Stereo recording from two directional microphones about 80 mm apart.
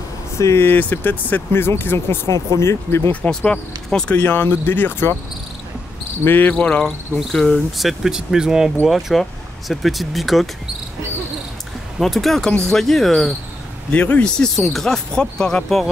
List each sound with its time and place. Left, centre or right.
0.4 s speech: left
0.7 s speech: left
3.3 s speech: centre
4.1 s speech: left
6.2 s speech: left; by 10.5 s centre
12.0 s speech: centre
13.9 s speech: centre